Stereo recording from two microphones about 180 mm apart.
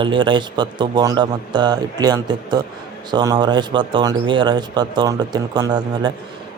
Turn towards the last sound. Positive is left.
turn(degrees=-25)  # may be behind; listen again after turning